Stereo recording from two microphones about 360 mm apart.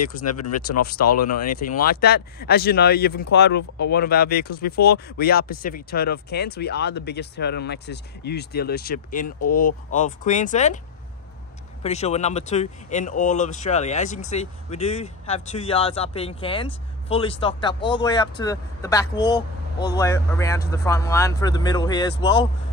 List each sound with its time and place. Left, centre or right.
0.3 s speech: left
1.5 s speech: left
11.8 s speech: centre